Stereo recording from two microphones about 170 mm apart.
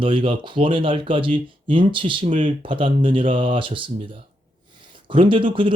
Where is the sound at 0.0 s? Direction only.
30° right (ahead or behind).